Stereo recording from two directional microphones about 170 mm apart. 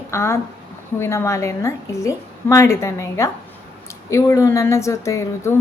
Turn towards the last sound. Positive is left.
turn(degrees=15)  # may be behind; listen again after turning